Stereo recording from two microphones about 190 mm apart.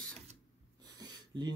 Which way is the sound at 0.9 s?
20° right (ahead or behind).